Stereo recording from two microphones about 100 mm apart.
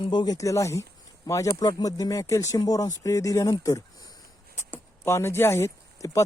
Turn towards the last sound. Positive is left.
turn(degrees=30)  # may be behind; listen again after turning